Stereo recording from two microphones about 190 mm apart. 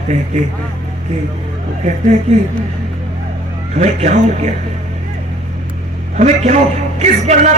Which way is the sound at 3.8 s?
40° right (ahead or behind).